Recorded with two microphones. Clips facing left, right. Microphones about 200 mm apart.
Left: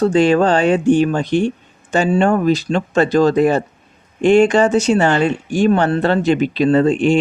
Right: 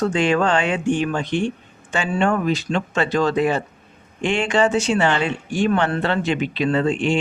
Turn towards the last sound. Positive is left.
turn(degrees=40)  # may be behind; listen again after turning